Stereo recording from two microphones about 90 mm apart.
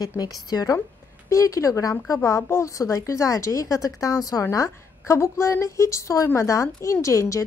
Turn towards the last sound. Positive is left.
turn(degrees=35)  # may be behind; listen again after turning